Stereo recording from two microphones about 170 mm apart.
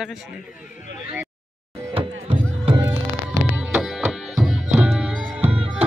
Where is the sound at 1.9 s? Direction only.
35° right (ahead or behind).